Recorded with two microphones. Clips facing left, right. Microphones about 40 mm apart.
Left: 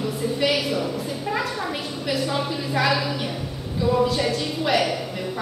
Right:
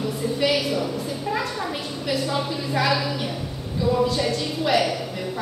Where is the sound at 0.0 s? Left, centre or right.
Centre.